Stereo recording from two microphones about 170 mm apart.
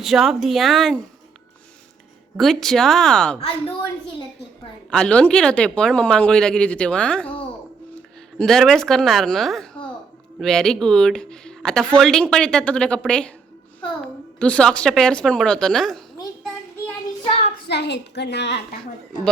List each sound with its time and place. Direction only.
0.0 s speech: centre (ahead or behind)
2.3 s speech: centre (ahead or behind)
4.9 s speech: 5° left (ahead or behind)
8.4 s speech: centre (ahead or behind)
14.3 s speech: 5° left (ahead or behind)
17.7 s a woman's voice: 80° left